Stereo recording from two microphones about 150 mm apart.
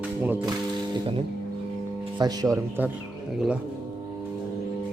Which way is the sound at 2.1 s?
25° right (ahead or behind).